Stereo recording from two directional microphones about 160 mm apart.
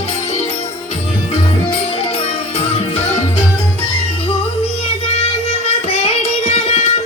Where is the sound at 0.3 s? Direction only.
40° left (ahead or behind).